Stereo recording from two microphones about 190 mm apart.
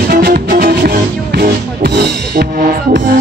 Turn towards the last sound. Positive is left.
turn(degrees=-50)  # may be behind; listen again after turning